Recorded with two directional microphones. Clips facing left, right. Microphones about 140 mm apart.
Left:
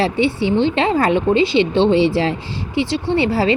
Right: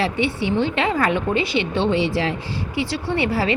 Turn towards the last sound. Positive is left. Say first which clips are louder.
# left 5 dB
turn(degrees=30)  # may be behind; listen again after turning